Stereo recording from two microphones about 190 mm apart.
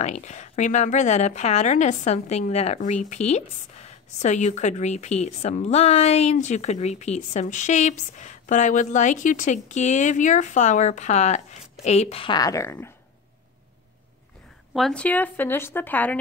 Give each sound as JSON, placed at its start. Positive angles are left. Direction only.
{"t": 0.0, "sound": "a woman's voice", "side_deg": 35}
{"t": 14.7, "sound": "speech", "side_deg": 0}